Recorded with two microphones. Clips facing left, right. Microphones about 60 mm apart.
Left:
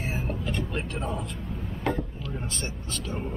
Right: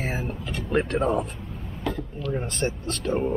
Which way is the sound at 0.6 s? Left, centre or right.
Right.